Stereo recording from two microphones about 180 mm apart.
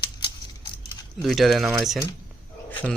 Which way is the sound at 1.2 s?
Centre (ahead or behind).